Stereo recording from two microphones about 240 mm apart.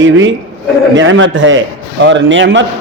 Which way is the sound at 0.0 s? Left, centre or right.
Right.